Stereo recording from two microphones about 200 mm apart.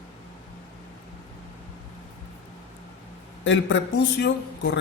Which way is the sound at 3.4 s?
70° left (ahead or behind).